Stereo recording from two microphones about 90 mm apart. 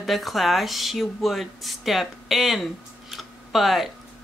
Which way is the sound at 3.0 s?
Centre (ahead or behind).